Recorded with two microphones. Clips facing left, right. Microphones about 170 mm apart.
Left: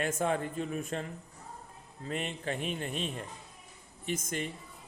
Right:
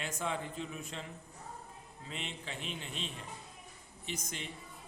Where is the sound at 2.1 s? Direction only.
50° left (ahead or behind).